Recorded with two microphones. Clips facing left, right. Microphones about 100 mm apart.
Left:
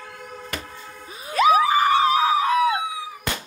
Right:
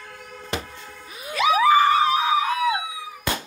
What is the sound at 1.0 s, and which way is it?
Music, 30° left (ahead or behind).